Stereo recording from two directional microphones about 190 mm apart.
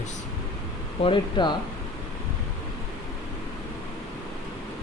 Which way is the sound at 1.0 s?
25° left (ahead or behind).